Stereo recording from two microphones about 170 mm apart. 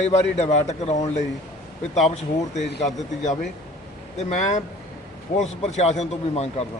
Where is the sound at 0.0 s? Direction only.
40° left (ahead or behind).